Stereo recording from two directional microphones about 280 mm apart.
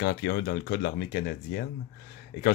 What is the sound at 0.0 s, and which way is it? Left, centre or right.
Speech, left.